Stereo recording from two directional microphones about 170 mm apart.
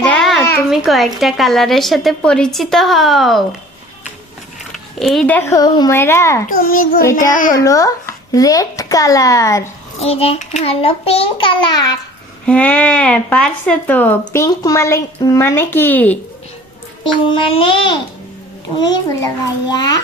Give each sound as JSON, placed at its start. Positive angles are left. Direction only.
{"t": 0.1, "sound": "a sound", "side_deg": 0}
{"t": 0.7, "sound": "a woman's voice", "side_deg": 0}
{"t": 4.7, "sound": "speech", "side_deg": 0}
{"t": 6.5, "sound": "a child's voice", "side_deg": 55}
{"t": 7.0, "sound": "speech", "side_deg": 15}
{"t": 10.0, "sound": "a child's voice", "side_deg": 35}
{"t": 12.5, "sound": "speech", "side_deg": 10}
{"t": 17.2, "sound": "a child's voice", "side_deg": 30}
{"t": 19.2, "sound": "speech", "side_deg": 25}